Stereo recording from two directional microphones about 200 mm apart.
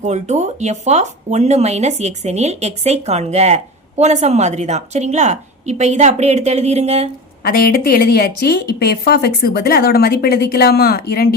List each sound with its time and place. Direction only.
0.0 s speech: 35° right (ahead or behind)
7.4 s a woman's voice: 45° left (ahead or behind)